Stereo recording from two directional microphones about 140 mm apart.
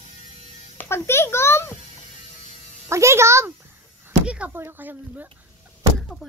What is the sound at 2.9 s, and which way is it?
Music, 20° right (ahead or behind).